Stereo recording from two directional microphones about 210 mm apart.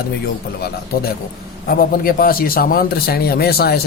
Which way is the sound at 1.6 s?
45° left (ahead or behind).